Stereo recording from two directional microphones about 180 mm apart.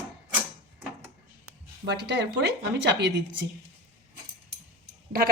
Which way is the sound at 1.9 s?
70° right (ahead or behind).